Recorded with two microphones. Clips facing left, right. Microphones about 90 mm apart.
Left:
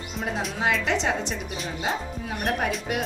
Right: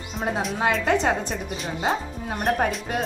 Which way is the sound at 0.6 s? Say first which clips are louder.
Right 3 dB; 40° right (ahead or behind).